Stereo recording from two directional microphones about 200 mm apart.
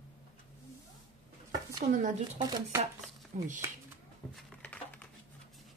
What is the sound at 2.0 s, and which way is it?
Speech, 40° right (ahead or behind).